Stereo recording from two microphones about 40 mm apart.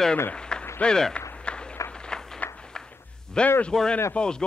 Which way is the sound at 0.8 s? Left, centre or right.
Centre.